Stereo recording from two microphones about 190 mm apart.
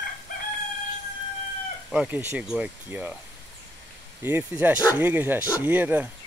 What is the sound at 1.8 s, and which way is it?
Speech, 5° right (ahead or behind).